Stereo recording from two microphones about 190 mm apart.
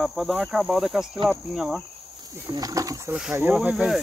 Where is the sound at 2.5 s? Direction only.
20° right (ahead or behind).